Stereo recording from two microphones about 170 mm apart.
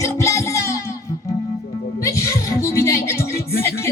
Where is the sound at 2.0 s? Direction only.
15° left (ahead or behind).